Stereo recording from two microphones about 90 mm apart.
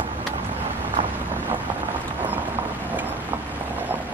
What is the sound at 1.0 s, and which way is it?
Boat, 70° right (ahead or behind).